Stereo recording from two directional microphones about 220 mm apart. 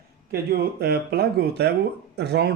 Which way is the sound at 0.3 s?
45° right (ahead or behind).